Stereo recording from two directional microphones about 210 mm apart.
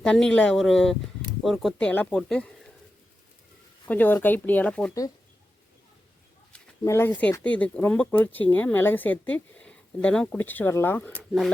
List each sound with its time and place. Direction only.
0.0 s speech: 5° left (ahead or behind)
3.8 s speech: 10° left (ahead or behind)
6.5 s speech: 10° left (ahead or behind)